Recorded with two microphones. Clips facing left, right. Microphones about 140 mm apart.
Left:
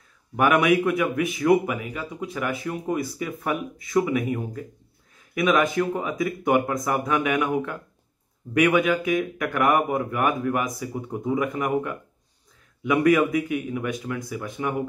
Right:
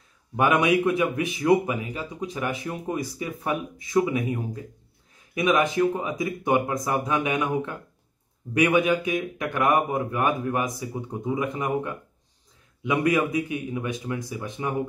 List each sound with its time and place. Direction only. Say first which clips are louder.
0.4 s a man's voice: left 1 dB; 25° right (ahead or behind)